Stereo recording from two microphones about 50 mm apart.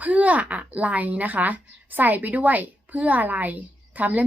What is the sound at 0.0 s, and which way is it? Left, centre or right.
A woman's voice, right.